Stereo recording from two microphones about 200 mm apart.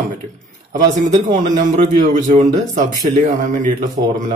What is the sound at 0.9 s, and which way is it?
Speech, 40° right (ahead or behind).